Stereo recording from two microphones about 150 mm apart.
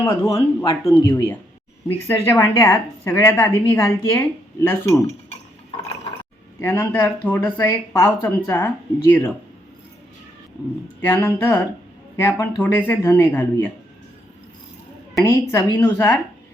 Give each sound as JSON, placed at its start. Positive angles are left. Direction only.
{"t": 0.0, "sound": "a woman's voice", "side_deg": 20}
{"t": 6.6, "sound": "a woman's voice", "side_deg": 15}
{"t": 7.9, "sound": "a woman's voice", "side_deg": 25}
{"t": 8.5, "sound": "a woman's voice", "side_deg": 15}
{"t": 11.0, "sound": "a woman's voice", "side_deg": 15}
{"t": 15.1, "sound": "a woman's voice", "side_deg": 20}